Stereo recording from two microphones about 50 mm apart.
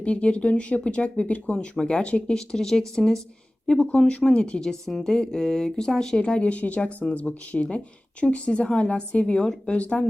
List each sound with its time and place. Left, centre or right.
0.0 s speech: left
3.8 s speech: left
4.6 s speech: centre; by 10.1 s left